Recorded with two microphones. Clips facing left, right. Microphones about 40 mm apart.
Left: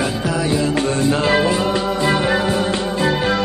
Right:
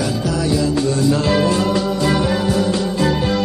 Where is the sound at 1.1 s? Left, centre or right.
Left.